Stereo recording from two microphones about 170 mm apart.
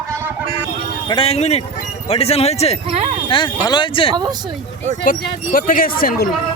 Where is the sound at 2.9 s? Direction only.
35° right (ahead or behind).